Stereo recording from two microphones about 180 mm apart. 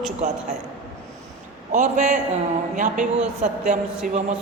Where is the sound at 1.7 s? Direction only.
45° right (ahead or behind).